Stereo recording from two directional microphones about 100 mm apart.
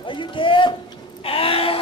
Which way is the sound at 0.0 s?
55° left (ahead or behind).